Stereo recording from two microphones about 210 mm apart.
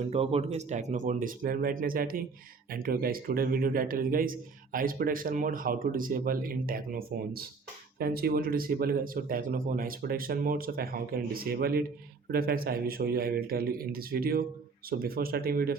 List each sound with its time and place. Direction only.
0.1 s a man's voice: 25° right (ahead or behind); by 15.7 s 45° right (ahead or behind)